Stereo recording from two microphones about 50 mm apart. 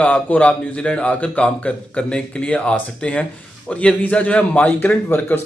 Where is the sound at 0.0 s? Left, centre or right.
Left.